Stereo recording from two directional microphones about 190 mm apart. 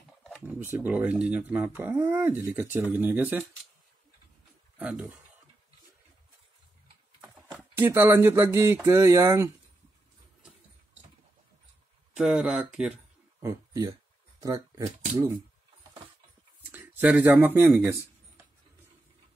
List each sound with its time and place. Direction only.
0.5 s speech: 10° right (ahead or behind)
4.7 s speech: 5° right (ahead or behind)
7.7 s speech: 10° right (ahead or behind)
12.1 s speech: 5° right (ahead or behind)
13.4 s speech: 15° right (ahead or behind)
16.7 s speech: 10° right (ahead or behind)